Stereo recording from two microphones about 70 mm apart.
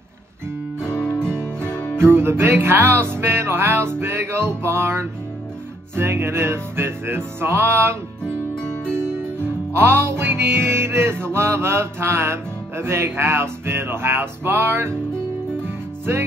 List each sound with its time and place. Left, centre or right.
0.7 s guitar: centre
1.3 s music: right
1.7 s music: centre
2.0 s music: right
8.2 s music: centre
8.9 s music: right